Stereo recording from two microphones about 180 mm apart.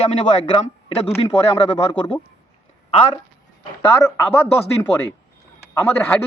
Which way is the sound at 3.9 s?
15° left (ahead or behind).